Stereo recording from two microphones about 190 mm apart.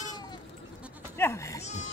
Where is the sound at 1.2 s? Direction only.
15° left (ahead or behind).